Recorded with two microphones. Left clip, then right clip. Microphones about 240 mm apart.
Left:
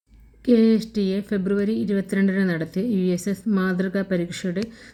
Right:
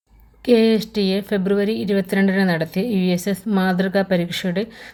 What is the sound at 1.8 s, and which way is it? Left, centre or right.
Speech, right.